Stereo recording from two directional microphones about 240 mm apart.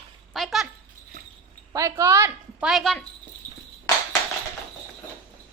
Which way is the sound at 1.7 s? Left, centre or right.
Centre.